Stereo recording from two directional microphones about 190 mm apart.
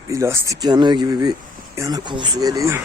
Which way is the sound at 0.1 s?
15° right (ahead or behind).